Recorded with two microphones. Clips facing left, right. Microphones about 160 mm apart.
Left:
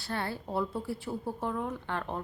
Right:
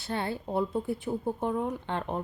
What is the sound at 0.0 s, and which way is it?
Speech, 20° right (ahead or behind).